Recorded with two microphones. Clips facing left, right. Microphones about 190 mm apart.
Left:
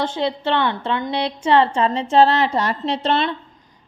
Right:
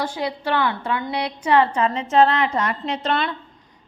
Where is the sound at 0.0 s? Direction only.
25° left (ahead or behind).